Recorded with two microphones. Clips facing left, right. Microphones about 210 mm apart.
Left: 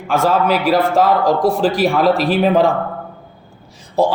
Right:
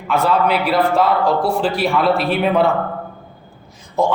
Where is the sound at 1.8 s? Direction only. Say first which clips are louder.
Left 3 dB; 45° left (ahead or behind).